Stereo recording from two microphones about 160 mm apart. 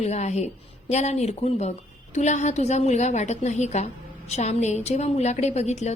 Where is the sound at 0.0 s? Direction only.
45° left (ahead or behind).